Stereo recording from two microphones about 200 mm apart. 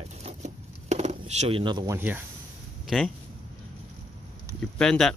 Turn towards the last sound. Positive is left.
turn(degrees=5)  # may be behind; listen again after turning